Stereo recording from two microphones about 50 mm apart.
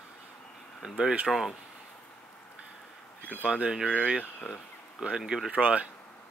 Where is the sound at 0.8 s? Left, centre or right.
Centre.